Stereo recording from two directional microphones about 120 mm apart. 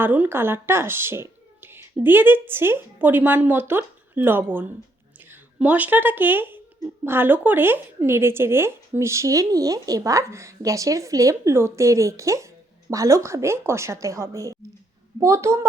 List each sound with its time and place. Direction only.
0.0 s speech: 15° right (ahead or behind)